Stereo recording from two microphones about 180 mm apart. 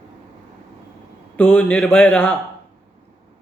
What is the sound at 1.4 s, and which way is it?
Speech, 10° left (ahead or behind).